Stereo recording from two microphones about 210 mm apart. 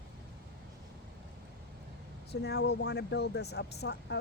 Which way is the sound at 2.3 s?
50° left (ahead or behind).